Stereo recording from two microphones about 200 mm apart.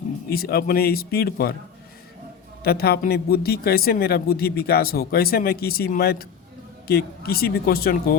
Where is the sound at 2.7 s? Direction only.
50° left (ahead or behind).